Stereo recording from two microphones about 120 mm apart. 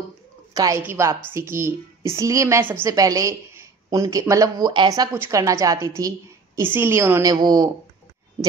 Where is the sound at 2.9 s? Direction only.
30° right (ahead or behind).